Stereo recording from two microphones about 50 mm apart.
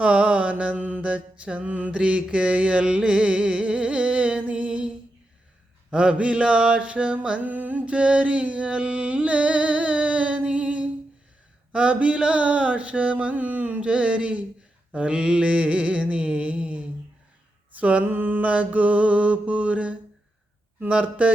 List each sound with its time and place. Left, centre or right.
0.0 s carnatic music: right
1.1 s carnatic music: right
2.0 s music: right
5.9 s carnatic music: right
7.9 s music: right
11.7 s carnatic music: right
17.7 s mantra: right
18.0 s carnatic music: right